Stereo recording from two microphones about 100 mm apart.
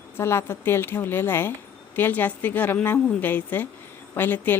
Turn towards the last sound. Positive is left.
turn(degrees=20)  # may be behind; listen again after turning